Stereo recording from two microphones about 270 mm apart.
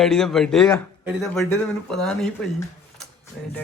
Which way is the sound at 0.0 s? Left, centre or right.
Centre.